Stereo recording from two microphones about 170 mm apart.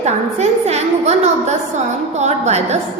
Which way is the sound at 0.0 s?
40° right (ahead or behind).